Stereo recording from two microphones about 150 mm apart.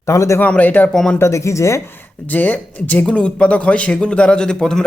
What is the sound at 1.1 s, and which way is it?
Speech, 20° left (ahead or behind).